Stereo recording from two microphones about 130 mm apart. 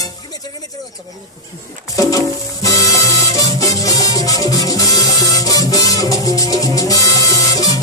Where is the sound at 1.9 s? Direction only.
25° left (ahead or behind).